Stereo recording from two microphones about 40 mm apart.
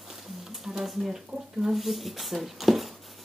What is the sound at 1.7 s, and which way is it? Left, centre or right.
Speech, centre.